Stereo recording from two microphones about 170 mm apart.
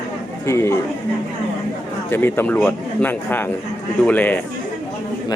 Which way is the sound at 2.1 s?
10° left (ahead or behind).